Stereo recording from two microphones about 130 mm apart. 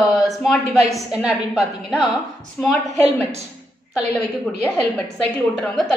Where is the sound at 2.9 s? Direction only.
55° right (ahead or behind).